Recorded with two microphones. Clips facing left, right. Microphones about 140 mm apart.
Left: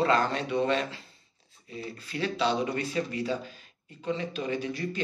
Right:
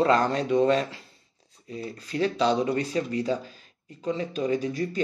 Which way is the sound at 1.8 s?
35° right (ahead or behind).